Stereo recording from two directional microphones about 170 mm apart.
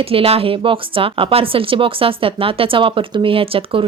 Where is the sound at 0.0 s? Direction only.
35° right (ahead or behind).